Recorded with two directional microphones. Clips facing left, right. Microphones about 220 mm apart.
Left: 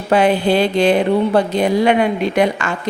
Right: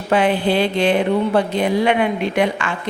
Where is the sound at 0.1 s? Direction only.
40° left (ahead or behind).